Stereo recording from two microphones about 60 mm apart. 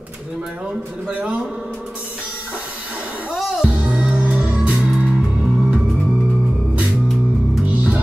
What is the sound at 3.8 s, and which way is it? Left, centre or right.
Music, centre.